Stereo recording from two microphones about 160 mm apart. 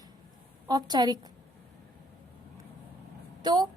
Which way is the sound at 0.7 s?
25° right (ahead or behind).